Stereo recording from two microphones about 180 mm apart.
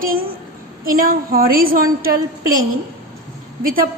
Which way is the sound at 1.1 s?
55° right (ahead or behind).